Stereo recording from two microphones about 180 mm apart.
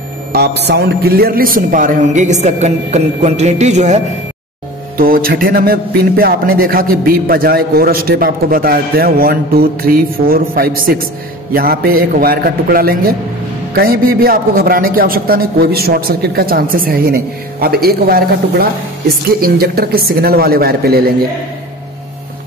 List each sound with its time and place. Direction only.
0.3 s a man's voice: 65° right (ahead or behind); by 4.0 s 40° right (ahead or behind)
4.9 s a man's voice: 55° right (ahead or behind)